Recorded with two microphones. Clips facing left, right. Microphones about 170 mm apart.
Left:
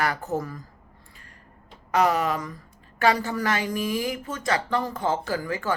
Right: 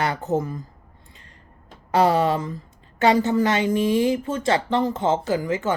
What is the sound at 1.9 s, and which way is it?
A woman's voice, 30° right (ahead or behind).